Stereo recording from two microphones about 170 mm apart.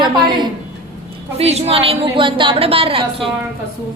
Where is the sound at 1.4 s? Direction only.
35° right (ahead or behind).